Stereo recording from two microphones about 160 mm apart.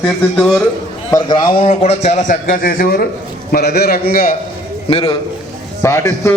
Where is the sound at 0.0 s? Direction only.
5° left (ahead or behind).